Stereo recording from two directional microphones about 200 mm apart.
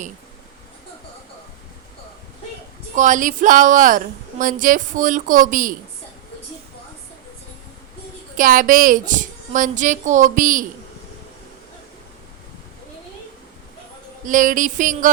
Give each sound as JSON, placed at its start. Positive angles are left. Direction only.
{"t": 2.9, "sound": "a woman's voice", "side_deg": -40}
{"t": 8.4, "sound": "a woman's voice", "side_deg": -45}
{"t": 14.3, "sound": "a woman's voice", "side_deg": -40}